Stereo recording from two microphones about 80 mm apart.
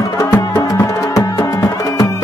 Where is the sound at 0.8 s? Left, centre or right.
Left.